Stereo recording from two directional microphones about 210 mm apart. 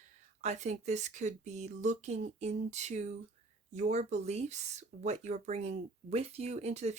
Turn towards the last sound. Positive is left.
turn(degrees=-30)  # may be behind; listen again after turning